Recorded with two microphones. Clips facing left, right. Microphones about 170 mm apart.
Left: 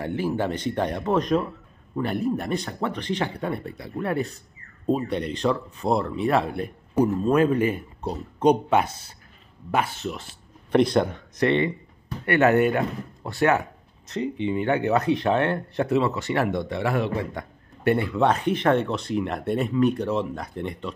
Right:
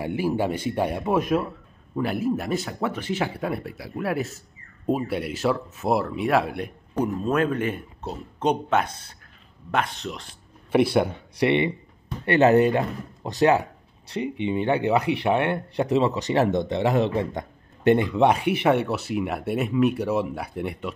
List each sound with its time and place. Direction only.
0.0 s a man's voice: 10° right (ahead or behind)
7.0 s speech: 10° left (ahead or behind)
10.7 s a man's voice: 5° right (ahead or behind)